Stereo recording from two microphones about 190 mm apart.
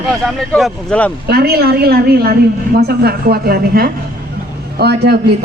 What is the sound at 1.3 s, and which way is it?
A woman's voice, 55° right (ahead or behind).